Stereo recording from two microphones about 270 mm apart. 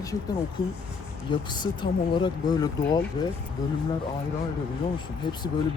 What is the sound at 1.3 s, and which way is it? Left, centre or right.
Speech, centre.